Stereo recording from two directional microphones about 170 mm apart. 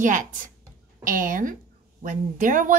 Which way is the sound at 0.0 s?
50° right (ahead or behind).